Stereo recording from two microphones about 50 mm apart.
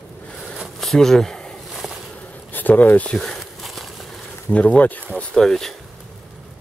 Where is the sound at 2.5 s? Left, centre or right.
Left.